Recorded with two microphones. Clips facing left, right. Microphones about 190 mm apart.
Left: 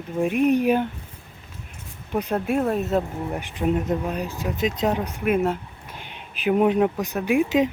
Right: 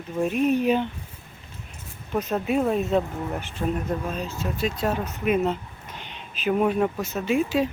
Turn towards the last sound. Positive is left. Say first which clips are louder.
# left 3 dB
turn(degrees=15)  # may be behind; listen again after turning